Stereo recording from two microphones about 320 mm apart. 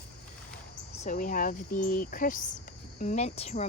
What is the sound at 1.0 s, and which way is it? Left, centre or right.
Speech, left.